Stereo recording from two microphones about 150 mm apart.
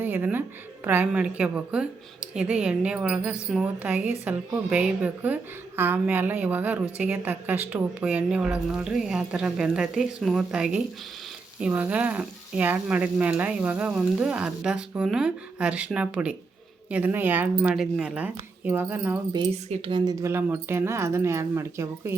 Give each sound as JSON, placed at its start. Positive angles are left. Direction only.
{"t": 0.0, "sound": "a sound", "side_deg": -10}
{"t": 0.9, "sound": "speech", "side_deg": -10}
{"t": 19.5, "sound": "speech", "side_deg": -45}
{"t": 20.2, "sound": "speech", "side_deg": -15}